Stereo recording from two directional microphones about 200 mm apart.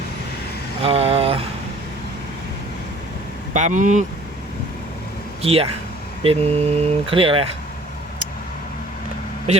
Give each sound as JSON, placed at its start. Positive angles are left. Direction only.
{"t": 0.8, "sound": "a sound", "side_deg": -30}
{"t": 3.5, "sound": "speech", "side_deg": -40}
{"t": 5.4, "sound": "speech", "side_deg": -30}